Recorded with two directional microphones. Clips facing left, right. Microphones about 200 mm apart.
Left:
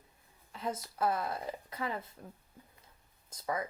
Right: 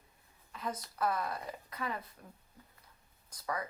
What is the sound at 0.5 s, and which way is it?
Speech, 25° left (ahead or behind).